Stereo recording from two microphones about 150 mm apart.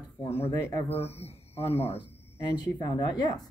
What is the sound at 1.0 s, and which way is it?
Speech, 45° left (ahead or behind).